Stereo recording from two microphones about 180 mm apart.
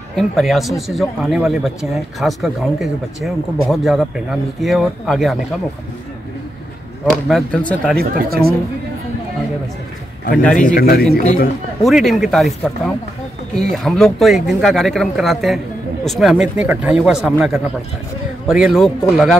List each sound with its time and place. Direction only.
0.1 s speech: centre (ahead or behind)
7.2 s speech: 5° left (ahead or behind)
8.0 s speech: 55° right (ahead or behind)
10.3 s speech: 5° left (ahead or behind)
10.6 s a man's voice: 55° left (ahead or behind)
11.8 s speech: centre (ahead or behind)